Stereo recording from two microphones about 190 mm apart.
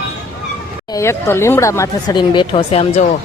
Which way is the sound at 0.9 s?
15° left (ahead or behind).